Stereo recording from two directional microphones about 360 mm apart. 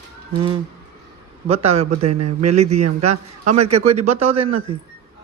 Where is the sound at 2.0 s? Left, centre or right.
Right.